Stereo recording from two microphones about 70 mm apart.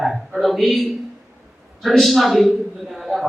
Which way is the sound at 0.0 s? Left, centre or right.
Centre.